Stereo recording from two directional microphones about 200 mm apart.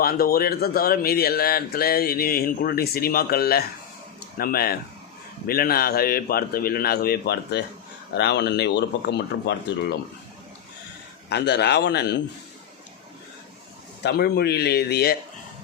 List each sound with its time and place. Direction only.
0.0 s speech: 50° left (ahead or behind)
11.3 s speech: 55° left (ahead or behind)
14.0 s speech: 55° left (ahead or behind)